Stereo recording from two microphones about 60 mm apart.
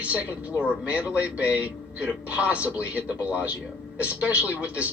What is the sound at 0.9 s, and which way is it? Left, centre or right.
Speech, centre.